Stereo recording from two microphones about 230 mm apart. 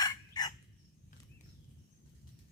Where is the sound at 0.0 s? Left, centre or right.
Centre.